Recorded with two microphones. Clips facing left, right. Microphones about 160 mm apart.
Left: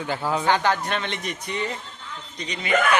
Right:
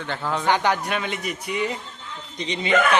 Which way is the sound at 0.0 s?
10° left (ahead or behind).